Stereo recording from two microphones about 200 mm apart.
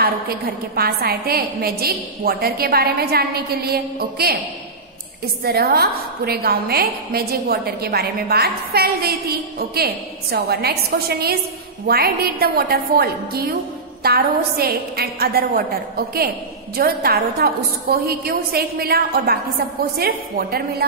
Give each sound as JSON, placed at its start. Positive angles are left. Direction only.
{"t": 0.0, "sound": "a woman's voice", "side_deg": -50}
{"t": 5.4, "sound": "a woman's voice", "side_deg": -50}
{"t": 16.7, "sound": "a woman's voice", "side_deg": -50}